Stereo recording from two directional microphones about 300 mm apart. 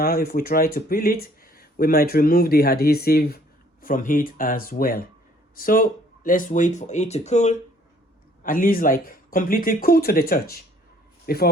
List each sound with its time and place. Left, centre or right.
0.0 s a man's voice: left